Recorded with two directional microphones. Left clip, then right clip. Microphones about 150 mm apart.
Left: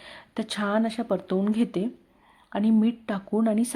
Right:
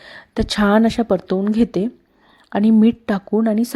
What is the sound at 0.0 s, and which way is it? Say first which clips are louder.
Speech: right 10 dB; 35° right (ahead or behind).